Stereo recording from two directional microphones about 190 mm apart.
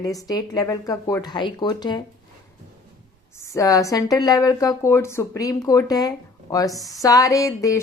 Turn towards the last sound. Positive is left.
turn(degrees=15)  # may be behind; listen again after turning